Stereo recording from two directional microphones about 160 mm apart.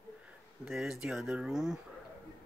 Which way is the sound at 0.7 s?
5° right (ahead or behind).